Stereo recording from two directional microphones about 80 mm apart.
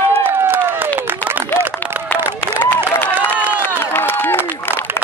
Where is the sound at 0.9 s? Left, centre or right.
Right.